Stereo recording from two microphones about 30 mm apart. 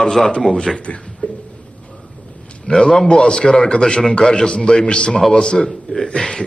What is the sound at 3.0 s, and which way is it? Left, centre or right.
A man's voice, left.